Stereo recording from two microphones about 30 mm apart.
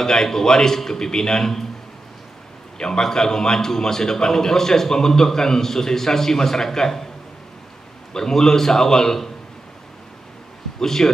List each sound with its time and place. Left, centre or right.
0.0 s speech: centre
2.8 s speech: centre
8.1 s speech: centre
10.8 s speech: centre